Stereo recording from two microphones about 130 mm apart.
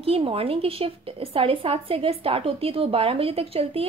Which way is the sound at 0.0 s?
45° right (ahead or behind).